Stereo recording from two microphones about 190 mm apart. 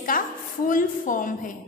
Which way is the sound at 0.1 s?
45° left (ahead or behind).